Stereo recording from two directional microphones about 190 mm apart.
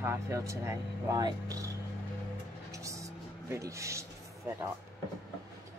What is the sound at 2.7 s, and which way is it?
Vehicle, 15° right (ahead or behind).